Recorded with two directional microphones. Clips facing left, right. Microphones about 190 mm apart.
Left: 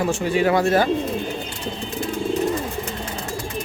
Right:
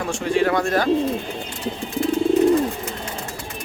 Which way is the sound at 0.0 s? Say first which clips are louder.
Left 1 dB; 5° left (ahead or behind).